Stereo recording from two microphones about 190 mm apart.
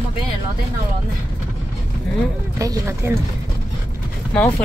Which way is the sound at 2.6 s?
15° right (ahead or behind).